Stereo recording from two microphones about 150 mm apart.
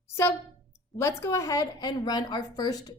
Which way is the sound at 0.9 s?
20° left (ahead or behind).